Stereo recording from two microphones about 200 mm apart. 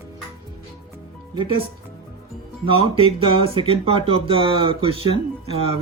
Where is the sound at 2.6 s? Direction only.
25° right (ahead or behind).